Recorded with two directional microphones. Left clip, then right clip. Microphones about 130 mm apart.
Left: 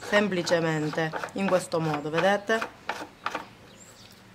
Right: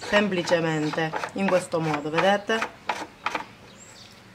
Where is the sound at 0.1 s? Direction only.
20° left (ahead or behind).